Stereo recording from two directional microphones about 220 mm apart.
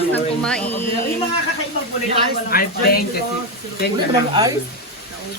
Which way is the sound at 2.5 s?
45° left (ahead or behind).